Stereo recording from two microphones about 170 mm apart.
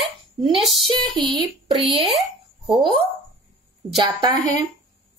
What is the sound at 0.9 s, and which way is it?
Speech, 25° right (ahead or behind).